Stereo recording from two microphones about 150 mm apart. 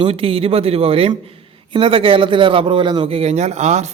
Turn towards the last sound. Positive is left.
turn(degrees=-50)  # may be behind; listen again after turning